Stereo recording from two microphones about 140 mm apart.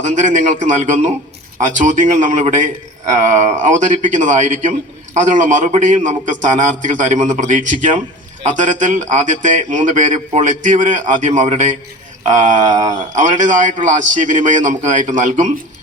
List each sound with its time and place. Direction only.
0.0 s speech: 60° right (ahead or behind)